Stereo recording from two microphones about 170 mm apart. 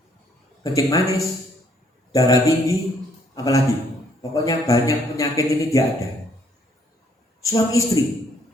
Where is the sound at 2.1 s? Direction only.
20° left (ahead or behind).